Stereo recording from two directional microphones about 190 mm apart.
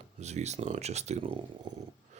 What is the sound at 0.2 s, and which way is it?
Speech, 35° right (ahead or behind).